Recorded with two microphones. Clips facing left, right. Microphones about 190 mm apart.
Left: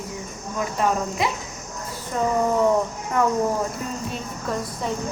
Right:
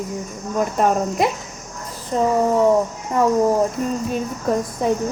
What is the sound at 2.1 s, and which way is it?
Speech, 35° right (ahead or behind).